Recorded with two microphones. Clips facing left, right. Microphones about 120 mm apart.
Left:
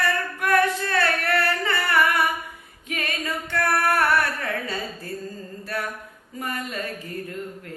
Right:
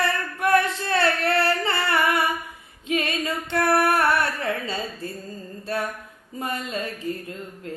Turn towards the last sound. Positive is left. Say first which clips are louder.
# right 3 dB
turn(degrees=-25)  # may be behind; listen again after turning